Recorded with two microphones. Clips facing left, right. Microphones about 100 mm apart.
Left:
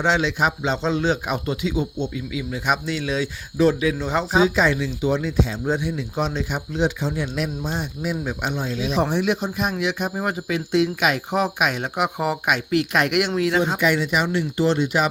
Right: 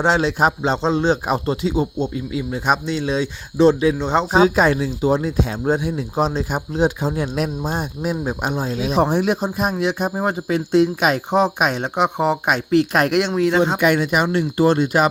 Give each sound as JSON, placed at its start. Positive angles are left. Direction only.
{"t": 0.0, "sound": "speech", "side_deg": -40}
{"t": 4.3, "sound": "speech", "side_deg": -45}
{"t": 13.7, "sound": "speech", "side_deg": -55}